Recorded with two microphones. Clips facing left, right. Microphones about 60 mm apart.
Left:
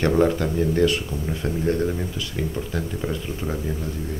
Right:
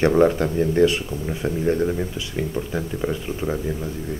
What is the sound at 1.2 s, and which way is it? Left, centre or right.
Speech, centre.